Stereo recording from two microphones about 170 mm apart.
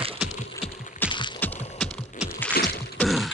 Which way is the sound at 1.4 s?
10° left (ahead or behind).